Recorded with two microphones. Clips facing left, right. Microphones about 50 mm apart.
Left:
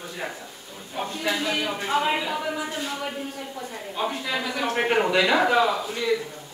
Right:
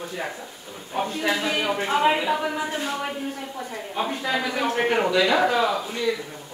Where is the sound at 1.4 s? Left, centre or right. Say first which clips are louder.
Right 2 dB; centre.